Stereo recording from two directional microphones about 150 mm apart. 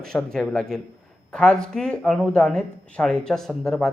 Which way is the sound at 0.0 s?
5° left (ahead or behind).